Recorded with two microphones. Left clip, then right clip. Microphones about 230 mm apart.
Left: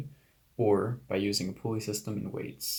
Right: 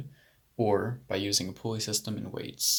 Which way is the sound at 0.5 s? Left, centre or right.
Right.